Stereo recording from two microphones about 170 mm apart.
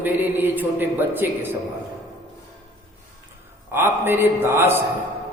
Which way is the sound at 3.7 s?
15° right (ahead or behind).